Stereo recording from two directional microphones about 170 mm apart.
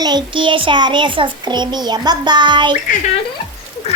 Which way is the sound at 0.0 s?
25° right (ahead or behind).